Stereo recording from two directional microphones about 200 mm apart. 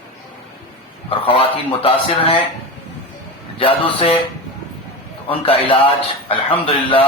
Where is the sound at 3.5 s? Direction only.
25° left (ahead or behind).